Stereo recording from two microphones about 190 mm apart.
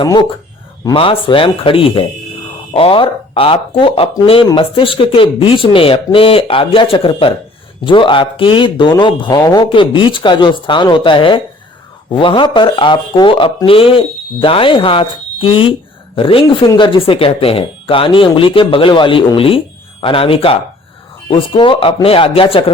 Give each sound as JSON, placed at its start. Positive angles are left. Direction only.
{"t": 0.0, "sound": "speech", "side_deg": 25}